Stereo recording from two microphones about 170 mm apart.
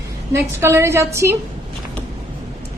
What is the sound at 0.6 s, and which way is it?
Speech, 15° right (ahead or behind).